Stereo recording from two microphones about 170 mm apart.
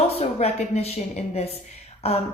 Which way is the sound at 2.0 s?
35° left (ahead or behind).